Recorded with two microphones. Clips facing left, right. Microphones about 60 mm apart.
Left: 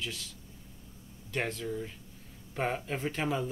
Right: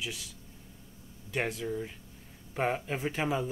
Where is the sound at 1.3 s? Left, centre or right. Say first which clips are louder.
Right 1 dB; centre.